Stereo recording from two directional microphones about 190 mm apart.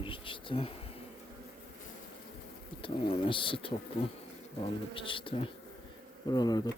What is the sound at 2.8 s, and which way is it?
Speech, 30° left (ahead or behind).